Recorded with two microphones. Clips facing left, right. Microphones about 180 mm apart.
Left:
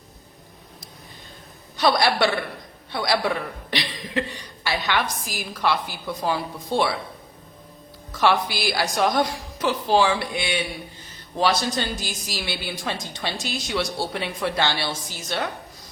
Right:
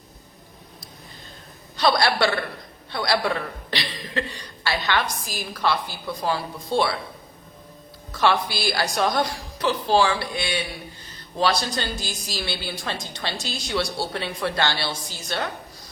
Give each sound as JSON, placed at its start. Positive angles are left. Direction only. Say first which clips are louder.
{"t": 1.7, "sound": "a woman's voice", "louder": "left 1 dB", "side_deg": 15}
{"t": 8.1, "sound": "a woman's voice", "louder": "left 1 dB", "side_deg": 15}